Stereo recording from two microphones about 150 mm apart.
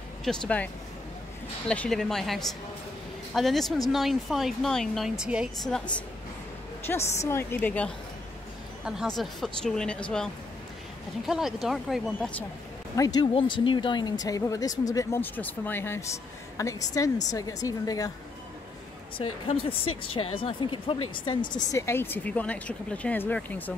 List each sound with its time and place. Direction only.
0.3 s speech: centre (ahead or behind)
1.7 s speech: 5° left (ahead or behind)
7.2 s speech: 15° left (ahead or behind)
8.8 s speech: centre (ahead or behind)
11.2 s speech: 5° right (ahead or behind)
12.9 s speech: 25° left (ahead or behind)
13.3 s speech: 35° left (ahead or behind)
19.1 s speech: 40° left (ahead or behind)
21.7 s speech: 15° left (ahead or behind)